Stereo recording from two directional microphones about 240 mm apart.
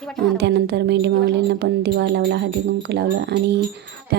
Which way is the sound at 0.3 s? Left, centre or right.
Right.